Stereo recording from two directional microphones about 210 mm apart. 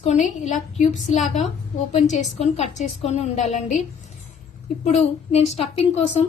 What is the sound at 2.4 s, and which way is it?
A woman's voice, 30° left (ahead or behind).